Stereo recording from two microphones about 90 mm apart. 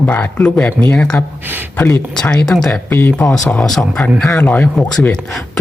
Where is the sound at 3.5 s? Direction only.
5° left (ahead or behind).